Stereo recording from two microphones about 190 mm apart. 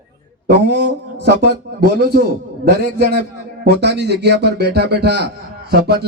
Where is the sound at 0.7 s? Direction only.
60° right (ahead or behind).